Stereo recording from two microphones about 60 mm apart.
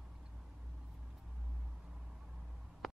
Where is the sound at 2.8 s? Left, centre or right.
Centre.